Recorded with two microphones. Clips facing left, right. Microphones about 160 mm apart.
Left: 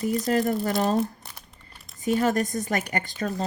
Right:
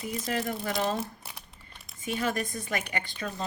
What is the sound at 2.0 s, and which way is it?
Speech, 40° left (ahead or behind).